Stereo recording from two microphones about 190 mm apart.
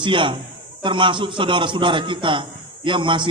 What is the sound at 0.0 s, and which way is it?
A man's voice, 25° right (ahead or behind).